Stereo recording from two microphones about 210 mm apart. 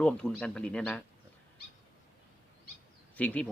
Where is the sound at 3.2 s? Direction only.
5° left (ahead or behind).